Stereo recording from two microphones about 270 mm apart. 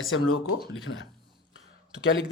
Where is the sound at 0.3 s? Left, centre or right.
Left.